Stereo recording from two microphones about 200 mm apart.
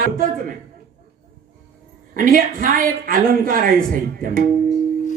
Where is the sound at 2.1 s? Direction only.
45° right (ahead or behind).